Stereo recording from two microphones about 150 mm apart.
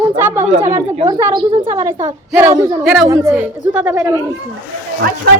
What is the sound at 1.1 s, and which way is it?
A woman's voice, 25° right (ahead or behind).